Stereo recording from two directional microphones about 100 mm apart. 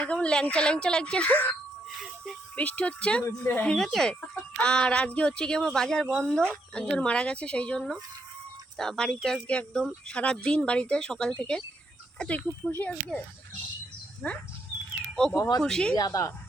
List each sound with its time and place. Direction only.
0.0 s speech: 10° left (ahead or behind)
2.6 s a woman's voice: 15° left (ahead or behind)
3.7 s speech: 5° left (ahead or behind)
15.6 s speech: 5° left (ahead or behind)
16.0 s speech: 35° left (ahead or behind)